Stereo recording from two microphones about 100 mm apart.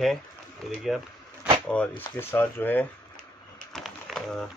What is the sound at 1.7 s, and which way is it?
Speech, 15° left (ahead or behind).